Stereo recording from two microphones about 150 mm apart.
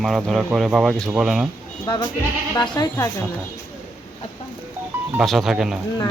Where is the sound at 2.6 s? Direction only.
25° left (ahead or behind).